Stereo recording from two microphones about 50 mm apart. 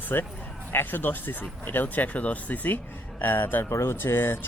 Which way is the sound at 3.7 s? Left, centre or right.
Left.